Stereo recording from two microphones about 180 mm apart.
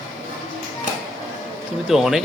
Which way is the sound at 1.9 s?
Centre (ahead or behind).